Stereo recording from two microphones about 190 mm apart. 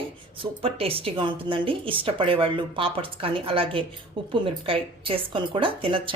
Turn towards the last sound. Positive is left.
turn(degrees=-25)  # may be behind; listen again after turning